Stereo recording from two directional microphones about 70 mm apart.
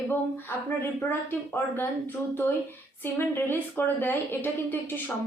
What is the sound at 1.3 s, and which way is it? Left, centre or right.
Speech, left.